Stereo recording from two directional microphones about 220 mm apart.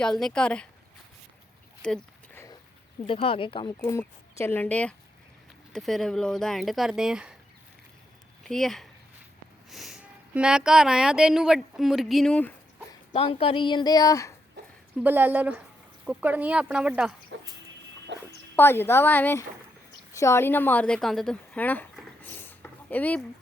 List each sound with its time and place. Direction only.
0.0 s speech: centre (ahead or behind)
1.8 s a sound: 5° left (ahead or behind)
3.1 s speech: 25° left (ahead or behind)
3.8 s speech: 10° left (ahead or behind); by 7.3 s 5° right (ahead or behind)
8.4 s speech: centre (ahead or behind)
13.1 s speech: 25° left (ahead or behind)
14.9 s speech: 10° right (ahead or behind)
18.1 s dog: 55° right (ahead or behind)
18.5 s speech: 10° left (ahead or behind)